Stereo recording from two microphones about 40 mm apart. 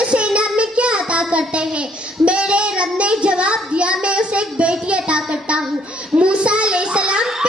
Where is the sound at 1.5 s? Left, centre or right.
Right.